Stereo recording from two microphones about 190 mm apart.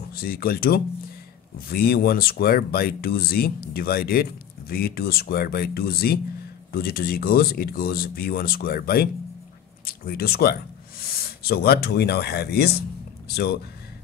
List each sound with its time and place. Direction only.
0.1 s speech: 50° left (ahead or behind)